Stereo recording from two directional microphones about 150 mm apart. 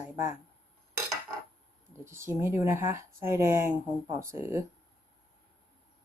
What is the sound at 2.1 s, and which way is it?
Speech, 15° right (ahead or behind).